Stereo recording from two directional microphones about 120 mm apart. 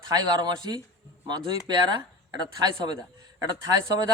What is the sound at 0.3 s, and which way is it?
Speech, 35° right (ahead or behind).